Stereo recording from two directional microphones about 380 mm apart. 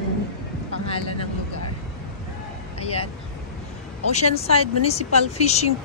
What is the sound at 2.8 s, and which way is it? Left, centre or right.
Vehicle, centre.